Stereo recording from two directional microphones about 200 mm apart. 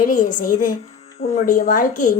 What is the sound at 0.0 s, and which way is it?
A child's voice, 40° left (ahead or behind).